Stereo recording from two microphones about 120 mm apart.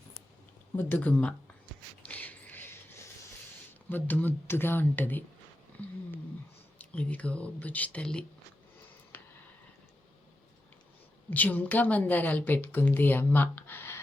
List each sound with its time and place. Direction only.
0.8 s a woman's voice: 15° left (ahead or behind)
2.0 s a sound: 15° left (ahead or behind)
3.8 s a woman's voice: 15° left (ahead or behind)
6.7 s a woman's voice: 10° left (ahead or behind)
11.3 s a woman's voice: 15° left (ahead or behind)